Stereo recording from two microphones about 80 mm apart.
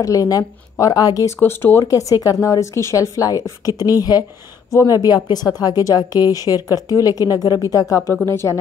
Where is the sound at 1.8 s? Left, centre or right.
Left.